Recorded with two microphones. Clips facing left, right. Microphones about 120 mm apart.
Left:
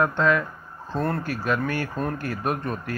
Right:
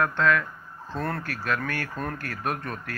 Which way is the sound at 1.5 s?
20° left (ahead or behind).